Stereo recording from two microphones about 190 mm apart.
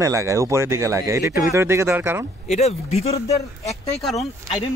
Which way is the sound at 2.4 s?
35° left (ahead or behind).